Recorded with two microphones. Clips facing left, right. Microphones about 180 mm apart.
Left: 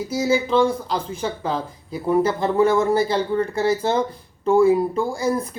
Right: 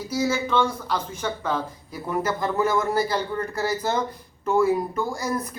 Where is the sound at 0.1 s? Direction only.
30° left (ahead or behind).